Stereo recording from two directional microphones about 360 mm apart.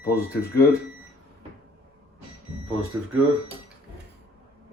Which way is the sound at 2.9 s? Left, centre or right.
Centre.